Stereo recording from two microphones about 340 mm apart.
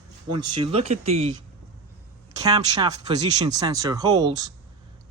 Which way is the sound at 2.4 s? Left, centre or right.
Centre.